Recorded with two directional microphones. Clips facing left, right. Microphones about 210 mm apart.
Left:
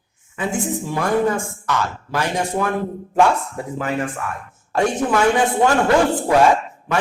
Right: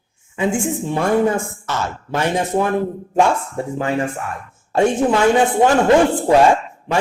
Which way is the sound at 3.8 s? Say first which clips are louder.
Right 2 dB; 25° right (ahead or behind).